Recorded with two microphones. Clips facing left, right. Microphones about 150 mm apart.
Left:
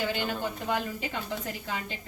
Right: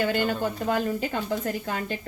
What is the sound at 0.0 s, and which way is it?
A woman's voice, 50° right (ahead or behind).